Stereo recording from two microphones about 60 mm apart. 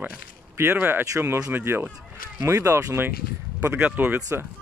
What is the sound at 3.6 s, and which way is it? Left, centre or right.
Speech, right.